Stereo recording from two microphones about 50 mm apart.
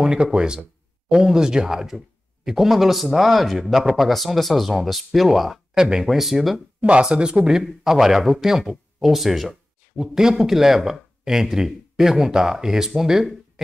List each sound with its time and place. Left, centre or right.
0.0 s speech: centre
6.8 s speech: right